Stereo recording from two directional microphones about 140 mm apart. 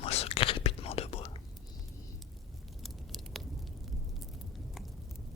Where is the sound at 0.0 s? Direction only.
45° left (ahead or behind).